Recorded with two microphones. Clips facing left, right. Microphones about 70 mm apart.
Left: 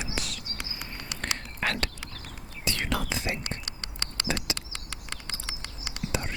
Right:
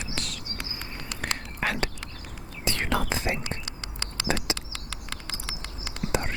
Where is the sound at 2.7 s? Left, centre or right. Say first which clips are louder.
Right 4 dB; right.